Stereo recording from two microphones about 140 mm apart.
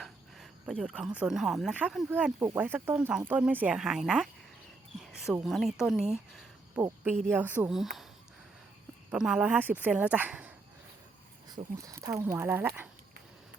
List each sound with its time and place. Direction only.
0.7 s speech: 5° right (ahead or behind)
2.0 s speech: 10° right (ahead or behind)
4.9 s a sound: 5° right (ahead or behind)
5.5 s speech: centre (ahead or behind)
6.7 s speech: 15° right (ahead or behind)
7.7 s speech: centre (ahead or behind)
9.0 s speech: 5° right (ahead or behind)
11.4 s speech: 25° right (ahead or behind)